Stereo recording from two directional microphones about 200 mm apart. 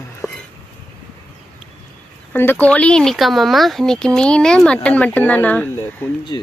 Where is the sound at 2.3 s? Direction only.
10° left (ahead or behind).